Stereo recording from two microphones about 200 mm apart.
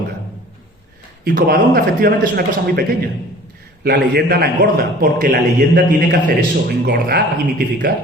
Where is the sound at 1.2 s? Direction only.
45° right (ahead or behind).